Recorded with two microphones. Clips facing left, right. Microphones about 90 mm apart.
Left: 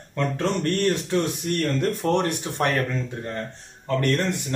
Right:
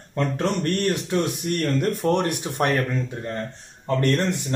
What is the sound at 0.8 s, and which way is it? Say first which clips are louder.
Speech: even; 10° right (ahead or behind).